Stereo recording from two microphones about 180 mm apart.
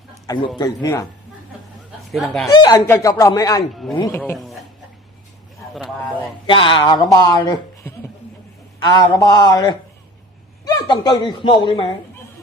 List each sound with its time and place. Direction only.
0.5 s a man's voice: 20° left (ahead or behind)
2.0 s speech: centre (ahead or behind)
2.5 s a man's voice: 20° left (ahead or behind)
4.4 s a sound: centre (ahead or behind)
6.5 s a man's voice: 25° left (ahead or behind)
8.8 s a man's voice: 20° left (ahead or behind)